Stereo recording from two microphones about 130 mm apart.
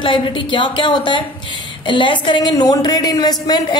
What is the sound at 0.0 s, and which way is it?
A woman's voice, 40° left (ahead or behind).